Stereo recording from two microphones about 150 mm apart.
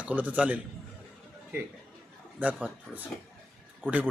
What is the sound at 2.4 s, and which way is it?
A man's voice, 10° right (ahead or behind).